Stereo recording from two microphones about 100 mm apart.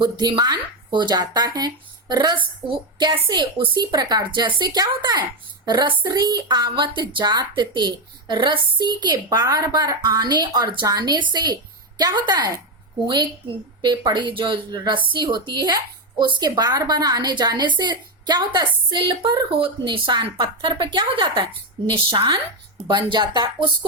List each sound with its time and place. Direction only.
0.0 s speech: 45° right (ahead or behind)
13.8 s a woman's voice: 45° right (ahead or behind)
21.8 s a woman's voice: 60° right (ahead or behind)
23.1 s speech: 45° right (ahead or behind)